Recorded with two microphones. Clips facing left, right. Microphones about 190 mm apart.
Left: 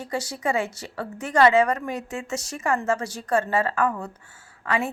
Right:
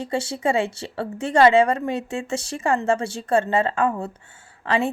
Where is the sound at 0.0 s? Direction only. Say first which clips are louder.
Right 4 dB; 25° right (ahead or behind).